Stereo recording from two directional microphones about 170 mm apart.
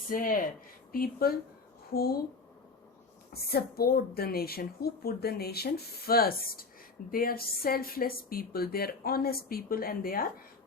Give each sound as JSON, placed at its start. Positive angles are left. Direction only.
{"t": 0.1, "sound": "a woman's voice", "side_deg": 55}
{"t": 3.3, "sound": "a woman's voice", "side_deg": 65}